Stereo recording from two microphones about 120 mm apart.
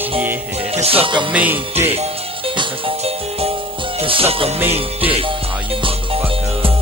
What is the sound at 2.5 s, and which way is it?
Music, 50° right (ahead or behind).